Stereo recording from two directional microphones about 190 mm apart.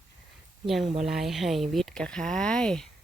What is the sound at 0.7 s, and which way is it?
Speech, centre (ahead or behind).